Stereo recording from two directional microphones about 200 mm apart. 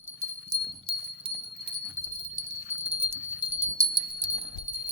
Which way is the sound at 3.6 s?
15° right (ahead or behind).